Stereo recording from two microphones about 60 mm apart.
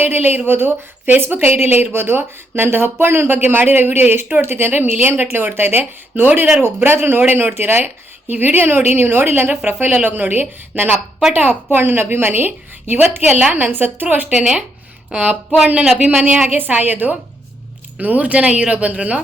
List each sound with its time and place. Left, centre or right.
0.0 s speech: right
14.3 s a woman's voice: centre